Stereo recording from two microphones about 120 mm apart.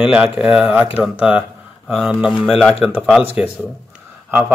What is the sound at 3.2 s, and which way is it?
Speech, 15° right (ahead or behind).